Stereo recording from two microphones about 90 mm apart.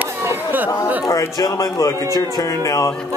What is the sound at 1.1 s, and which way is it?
A man's voice, 40° left (ahead or behind).